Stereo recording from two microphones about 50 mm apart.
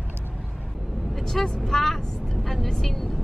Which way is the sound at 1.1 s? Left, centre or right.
Centre.